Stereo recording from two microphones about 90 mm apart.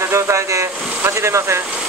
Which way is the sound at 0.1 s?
35° right (ahead or behind).